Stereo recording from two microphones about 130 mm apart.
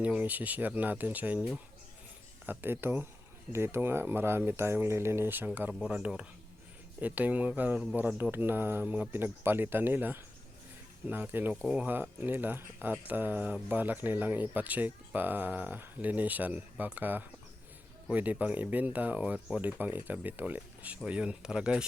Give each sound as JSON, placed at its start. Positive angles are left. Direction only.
{"t": 0.0, "sound": "speech", "side_deg": -10}